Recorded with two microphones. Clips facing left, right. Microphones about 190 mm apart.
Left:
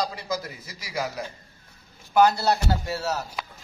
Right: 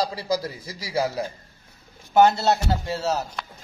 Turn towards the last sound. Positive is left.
turn(degrees=-25)  # may be behind; listen again after turning